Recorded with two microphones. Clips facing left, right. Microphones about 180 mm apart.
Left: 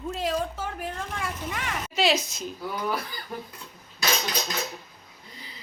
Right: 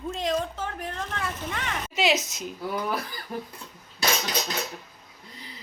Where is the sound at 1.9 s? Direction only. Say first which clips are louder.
Even; 15° right (ahead or behind).